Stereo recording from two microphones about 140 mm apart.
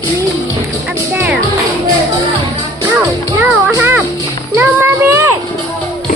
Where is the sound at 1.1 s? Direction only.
15° right (ahead or behind).